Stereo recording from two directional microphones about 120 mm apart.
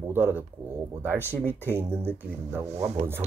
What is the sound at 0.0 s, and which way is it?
Speech, 20° right (ahead or behind).